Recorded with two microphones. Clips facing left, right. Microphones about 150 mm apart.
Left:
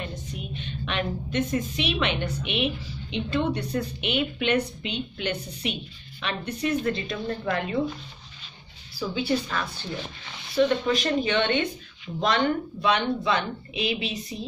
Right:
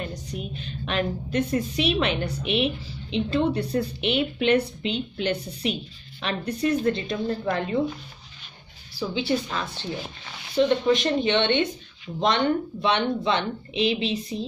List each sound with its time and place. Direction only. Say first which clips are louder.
0.0 s a woman's voice: right 3 dB; 35° right (ahead or behind)
9.1 s speech: even; 25° right (ahead or behind)
12.8 s a woman's voice: even; 30° right (ahead or behind)